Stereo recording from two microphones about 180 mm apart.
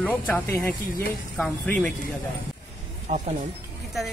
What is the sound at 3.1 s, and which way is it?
Speech, 40° right (ahead or behind).